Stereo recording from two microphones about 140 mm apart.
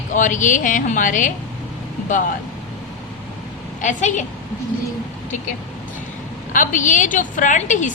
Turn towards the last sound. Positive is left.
turn(degrees=60)  # may be behind; listen again after turning